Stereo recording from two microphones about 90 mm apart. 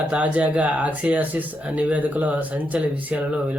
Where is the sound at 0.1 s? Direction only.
15° right (ahead or behind).